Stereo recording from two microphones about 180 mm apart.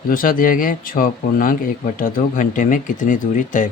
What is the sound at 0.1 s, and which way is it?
Speech, 50° left (ahead or behind).